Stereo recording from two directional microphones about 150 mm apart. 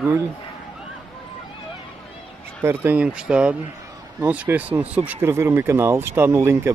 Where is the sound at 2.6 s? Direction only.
15° right (ahead or behind).